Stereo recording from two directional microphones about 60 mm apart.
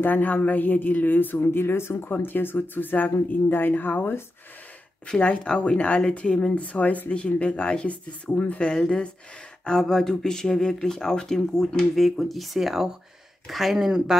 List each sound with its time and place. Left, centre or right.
0.0 s a woman's voice: left
5.0 s speech: centre